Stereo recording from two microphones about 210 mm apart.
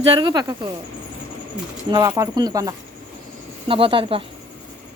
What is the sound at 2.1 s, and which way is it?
Speech, 15° right (ahead or behind).